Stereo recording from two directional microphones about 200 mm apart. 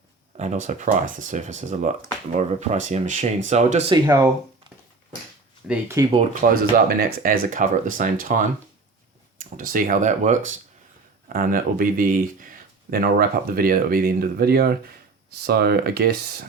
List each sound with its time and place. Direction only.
0.3 s speech: 35° right (ahead or behind)
3.9 s speech: 15° right (ahead or behind)
5.6 s speech: 10° right (ahead or behind)
6.4 s speech: 45° right (ahead or behind)
11.3 s speech: 50° right (ahead or behind)